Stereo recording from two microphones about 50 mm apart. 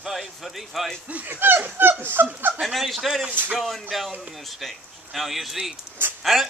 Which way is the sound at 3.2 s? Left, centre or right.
Right.